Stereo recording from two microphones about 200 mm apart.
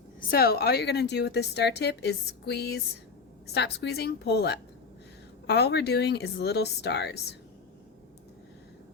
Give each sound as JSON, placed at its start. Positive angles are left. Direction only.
{"t": 0.2, "sound": "a woman's voice", "side_deg": 50}